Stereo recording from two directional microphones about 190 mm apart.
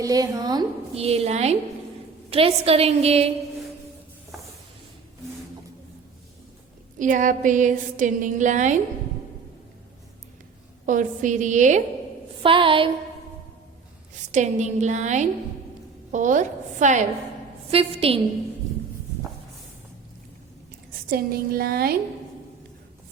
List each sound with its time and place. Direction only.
0.0 s a woman's voice: 20° right (ahead or behind)
0.9 s a woman's voice: 30° right (ahead or behind)
7.0 s a woman's voice: 40° right (ahead or behind)
10.8 s a woman's voice: 45° right (ahead or behind)
12.4 s a woman's voice: 25° right (ahead or behind)
14.3 s a woman's voice: 40° right (ahead or behind)
21.1 s a woman's voice: 55° right (ahead or behind)